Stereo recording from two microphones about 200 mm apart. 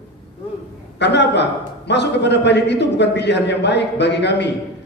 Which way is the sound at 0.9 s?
60° left (ahead or behind).